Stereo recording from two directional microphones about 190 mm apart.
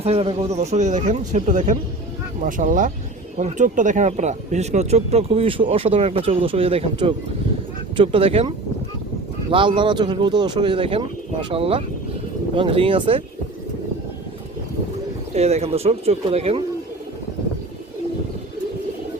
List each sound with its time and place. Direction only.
0.0 s speech: 30° right (ahead or behind)
15.3 s speech: 35° right (ahead or behind)